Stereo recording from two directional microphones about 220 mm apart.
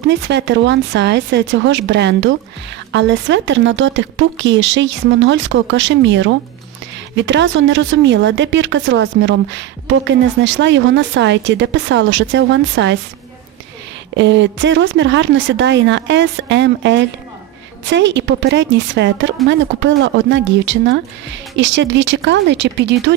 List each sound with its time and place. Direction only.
0.1 s a woman's voice: 55° right (ahead or behind)
14.2 s a woman's voice: 55° right (ahead or behind)